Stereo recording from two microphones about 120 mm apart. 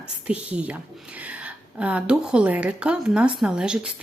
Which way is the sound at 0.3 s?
10° right (ahead or behind).